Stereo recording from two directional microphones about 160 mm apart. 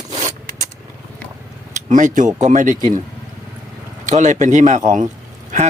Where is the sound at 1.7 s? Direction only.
50° right (ahead or behind).